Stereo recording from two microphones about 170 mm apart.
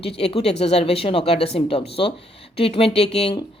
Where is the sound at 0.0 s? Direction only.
35° left (ahead or behind).